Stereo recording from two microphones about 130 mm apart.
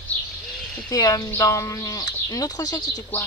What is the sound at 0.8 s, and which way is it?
Speech, 25° left (ahead or behind).